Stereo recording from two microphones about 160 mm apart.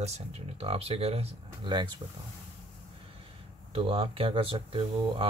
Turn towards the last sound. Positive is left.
turn(degrees=-35)  # may be behind; listen again after turning